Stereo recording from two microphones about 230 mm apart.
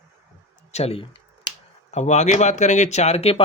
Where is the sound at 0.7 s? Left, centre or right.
Left.